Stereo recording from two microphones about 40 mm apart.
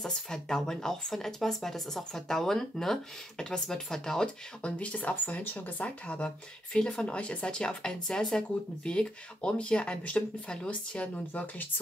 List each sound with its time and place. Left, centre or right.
0.1 s speech: centre
4.6 s speech: left
5.2 s speech: left
6.0 s speech: left